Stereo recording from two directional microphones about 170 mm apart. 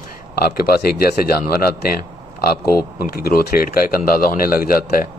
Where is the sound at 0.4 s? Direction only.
65° left (ahead or behind).